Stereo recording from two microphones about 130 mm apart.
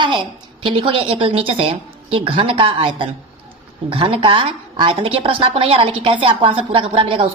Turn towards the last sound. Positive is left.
turn(degrees=-40)  # may be behind; listen again after turning